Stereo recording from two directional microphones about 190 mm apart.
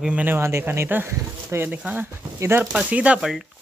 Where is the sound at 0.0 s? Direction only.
10° right (ahead or behind).